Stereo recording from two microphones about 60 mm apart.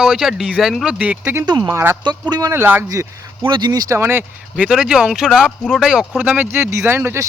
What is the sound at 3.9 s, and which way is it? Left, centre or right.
Speech, right.